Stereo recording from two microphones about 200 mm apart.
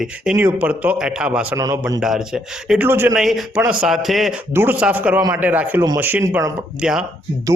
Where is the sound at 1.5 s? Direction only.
15° right (ahead or behind).